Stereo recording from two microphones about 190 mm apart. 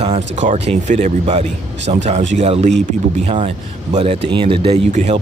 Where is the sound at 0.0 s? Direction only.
35° right (ahead or behind).